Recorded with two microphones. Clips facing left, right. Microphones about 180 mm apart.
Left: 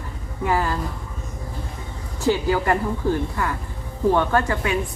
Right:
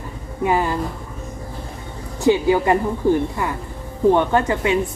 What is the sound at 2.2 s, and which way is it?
Speech, 15° right (ahead or behind).